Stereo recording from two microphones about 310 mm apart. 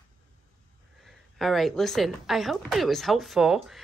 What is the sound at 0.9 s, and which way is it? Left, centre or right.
Speech, centre.